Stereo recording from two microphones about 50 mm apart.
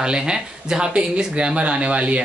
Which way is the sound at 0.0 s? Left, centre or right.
Centre.